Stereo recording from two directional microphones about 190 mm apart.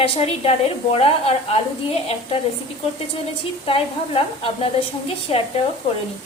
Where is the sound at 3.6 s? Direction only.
30° left (ahead or behind).